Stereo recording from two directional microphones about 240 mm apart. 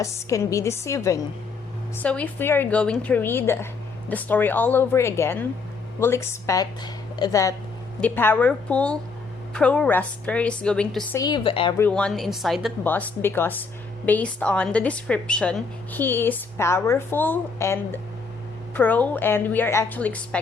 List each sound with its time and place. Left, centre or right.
0.0 s a woman's voice: centre
11.2 s a woman's voice: centre
11.8 s a woman's voice: centre